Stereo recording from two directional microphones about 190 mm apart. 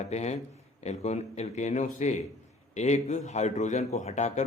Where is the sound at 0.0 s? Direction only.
35° left (ahead or behind).